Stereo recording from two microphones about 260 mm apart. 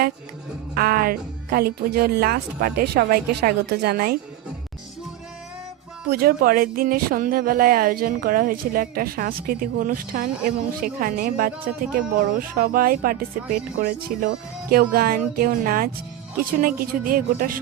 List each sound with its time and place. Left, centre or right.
0.7 s speech: right
6.1 s speech: right